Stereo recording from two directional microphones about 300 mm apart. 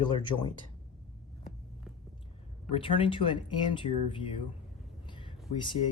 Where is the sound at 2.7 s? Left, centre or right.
Centre.